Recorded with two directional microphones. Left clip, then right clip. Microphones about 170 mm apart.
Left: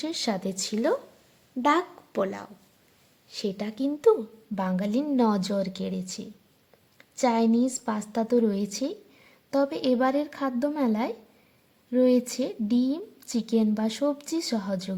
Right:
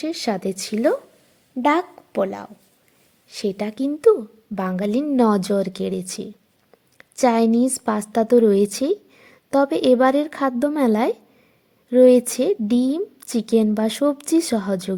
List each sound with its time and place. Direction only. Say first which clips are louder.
0.0 s speech: right 6 dB; 20° right (ahead or behind)
3.2 s a woman's voice: right 7 dB; 35° right (ahead or behind)